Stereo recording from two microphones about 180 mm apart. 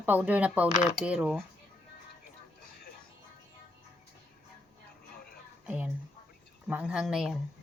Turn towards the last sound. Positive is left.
turn(degrees=0)  # may be behind; listen again after turning